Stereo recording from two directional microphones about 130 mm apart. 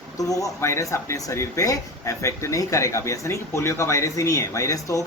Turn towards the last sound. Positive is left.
turn(degrees=25)  # may be behind; listen again after turning